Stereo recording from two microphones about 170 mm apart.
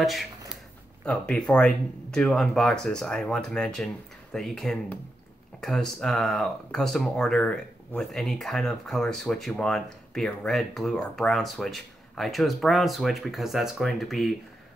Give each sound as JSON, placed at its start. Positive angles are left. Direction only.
{"t": 1.0, "sound": "speech", "side_deg": 5}